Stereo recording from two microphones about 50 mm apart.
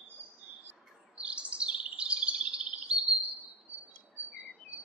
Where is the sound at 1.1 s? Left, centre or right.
Right.